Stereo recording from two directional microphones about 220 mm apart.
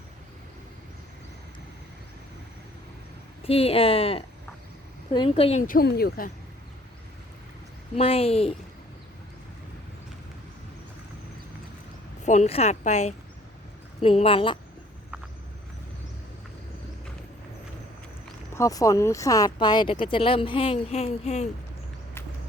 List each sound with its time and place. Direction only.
3.4 s a woman's voice: 25° left (ahead or behind); by 6.3 s 40° left (ahead or behind)
7.9 s speech: 25° left (ahead or behind)
12.2 s a woman's voice: 30° left (ahead or behind)
18.5 s speech: 15° left (ahead or behind); by 21.4 s 30° left (ahead or behind)